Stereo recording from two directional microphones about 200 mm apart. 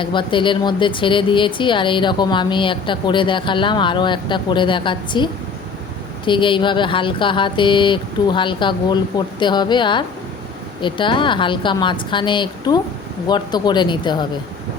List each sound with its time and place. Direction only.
0.0 s speech: 25° left (ahead or behind)